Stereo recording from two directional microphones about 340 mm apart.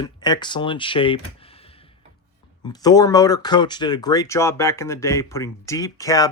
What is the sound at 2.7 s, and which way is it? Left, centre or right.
Speech, centre.